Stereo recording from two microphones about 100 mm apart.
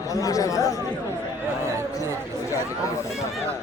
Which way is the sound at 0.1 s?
35° left (ahead or behind).